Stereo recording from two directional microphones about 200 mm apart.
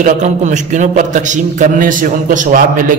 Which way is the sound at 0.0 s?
35° right (ahead or behind).